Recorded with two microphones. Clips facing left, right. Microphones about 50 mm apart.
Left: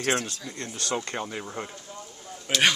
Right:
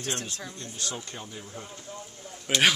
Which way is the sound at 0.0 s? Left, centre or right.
Left.